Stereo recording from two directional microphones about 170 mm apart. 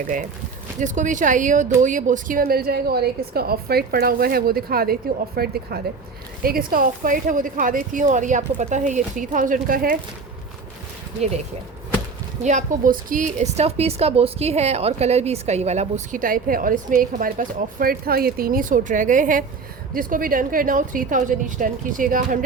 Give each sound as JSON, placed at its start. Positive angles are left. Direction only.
{"t": 0.8, "sound": "a woman's voice", "side_deg": -45}
{"t": 12.4, "sound": "a woman's voice", "side_deg": -45}